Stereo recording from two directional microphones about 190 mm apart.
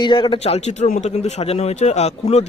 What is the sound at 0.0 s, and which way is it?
Speech, 25° left (ahead or behind).